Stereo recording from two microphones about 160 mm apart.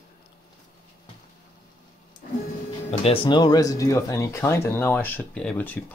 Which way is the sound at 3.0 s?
35° left (ahead or behind).